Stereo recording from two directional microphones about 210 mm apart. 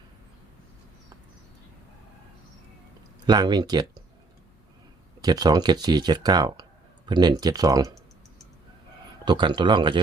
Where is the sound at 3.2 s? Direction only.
20° right (ahead or behind).